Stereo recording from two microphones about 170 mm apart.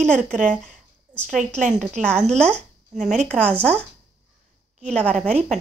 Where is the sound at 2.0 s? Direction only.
5° left (ahead or behind).